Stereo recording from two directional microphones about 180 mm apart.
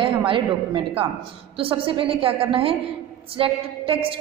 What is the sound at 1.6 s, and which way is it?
A woman's voice, 30° right (ahead or behind).